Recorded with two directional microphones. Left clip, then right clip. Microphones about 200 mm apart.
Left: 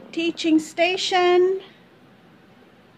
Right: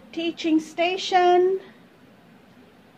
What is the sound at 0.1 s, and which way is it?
Speech, 40° left (ahead or behind).